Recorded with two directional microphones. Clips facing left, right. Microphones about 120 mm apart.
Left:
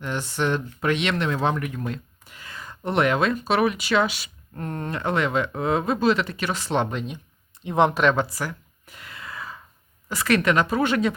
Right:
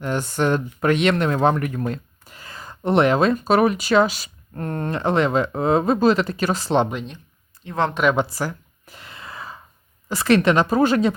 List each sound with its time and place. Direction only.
0.0 s speech: 45° right (ahead or behind)
4.9 s speech: 30° right (ahead or behind)
6.9 s speech: 5° left (ahead or behind)
7.6 s speech: 20° left (ahead or behind)
8.3 s a sound: 35° right (ahead or behind)
10.1 s speech: 30° right (ahead or behind)